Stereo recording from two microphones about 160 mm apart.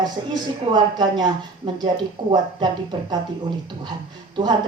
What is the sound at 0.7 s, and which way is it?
A woman's voice, 25° right (ahead or behind).